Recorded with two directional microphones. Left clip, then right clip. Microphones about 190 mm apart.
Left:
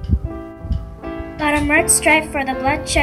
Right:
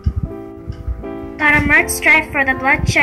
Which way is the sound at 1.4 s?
50° left (ahead or behind).